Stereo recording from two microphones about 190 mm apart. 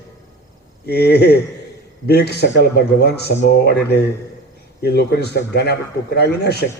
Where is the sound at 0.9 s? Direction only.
60° left (ahead or behind).